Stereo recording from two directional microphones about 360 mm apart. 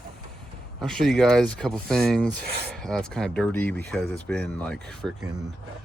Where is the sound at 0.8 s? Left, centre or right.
Centre.